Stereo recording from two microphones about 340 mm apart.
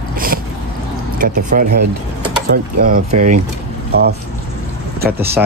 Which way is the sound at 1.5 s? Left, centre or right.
Right.